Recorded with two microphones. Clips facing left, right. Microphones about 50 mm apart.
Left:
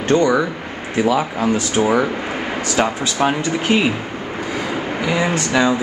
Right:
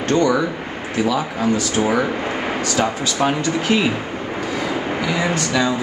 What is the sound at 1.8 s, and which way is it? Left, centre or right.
Speech, centre.